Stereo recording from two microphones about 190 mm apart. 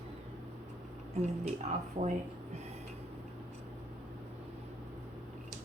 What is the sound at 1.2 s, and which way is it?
Speech, 35° right (ahead or behind).